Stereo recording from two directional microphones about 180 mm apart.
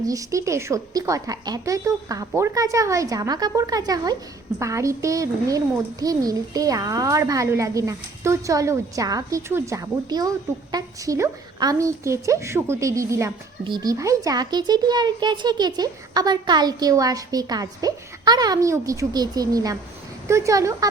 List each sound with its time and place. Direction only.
0.0 s a woman's voice: 20° right (ahead or behind)